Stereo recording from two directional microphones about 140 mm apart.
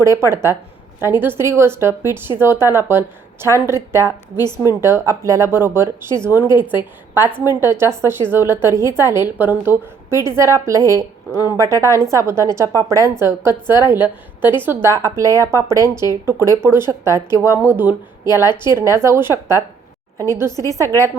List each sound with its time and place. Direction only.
0.0 s a woman's voice: 20° right (ahead or behind)